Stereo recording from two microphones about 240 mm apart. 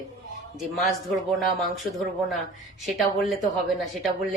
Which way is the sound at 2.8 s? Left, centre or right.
Centre.